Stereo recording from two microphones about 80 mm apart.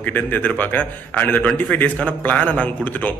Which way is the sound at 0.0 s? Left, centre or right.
Left.